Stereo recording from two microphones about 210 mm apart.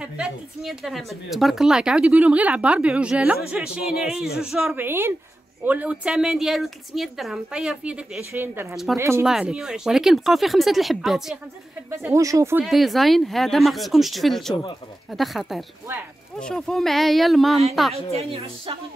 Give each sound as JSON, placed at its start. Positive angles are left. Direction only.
{"t": 0.0, "sound": "a woman's voice", "side_deg": -5}
{"t": 11.9, "sound": "a woman's voice", "side_deg": -15}
{"t": 12.6, "sound": "a woman's voice", "side_deg": 0}
{"t": 18.1, "sound": "a woman's voice", "side_deg": -25}